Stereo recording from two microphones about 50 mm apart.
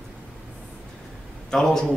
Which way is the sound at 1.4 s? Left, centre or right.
Centre.